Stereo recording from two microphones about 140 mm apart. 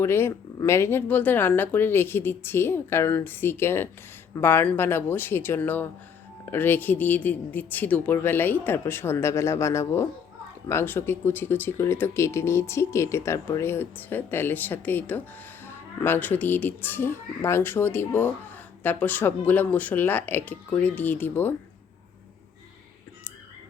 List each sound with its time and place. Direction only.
0.0 s speech: 15° left (ahead or behind)